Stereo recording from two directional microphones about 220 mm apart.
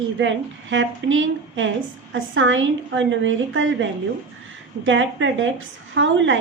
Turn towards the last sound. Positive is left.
turn(degrees=-60)  # may be behind; listen again after turning